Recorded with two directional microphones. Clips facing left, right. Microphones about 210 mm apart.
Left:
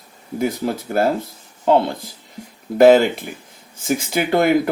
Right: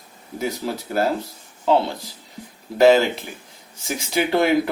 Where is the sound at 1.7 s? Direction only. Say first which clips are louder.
Left 3 dB; 55° left (ahead or behind).